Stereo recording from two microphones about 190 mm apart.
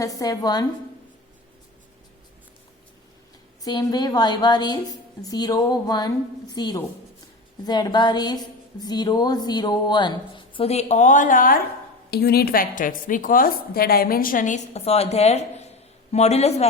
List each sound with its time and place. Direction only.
0.0 s a woman's voice: 20° left (ahead or behind)
3.6 s a woman's voice: 20° left (ahead or behind)